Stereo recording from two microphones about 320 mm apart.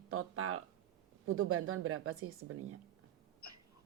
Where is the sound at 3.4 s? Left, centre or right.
Left.